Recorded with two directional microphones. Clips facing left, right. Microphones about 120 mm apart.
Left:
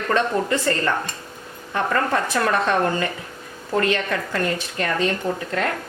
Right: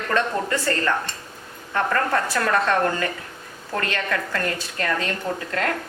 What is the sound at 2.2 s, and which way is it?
Speech, 20° left (ahead or behind).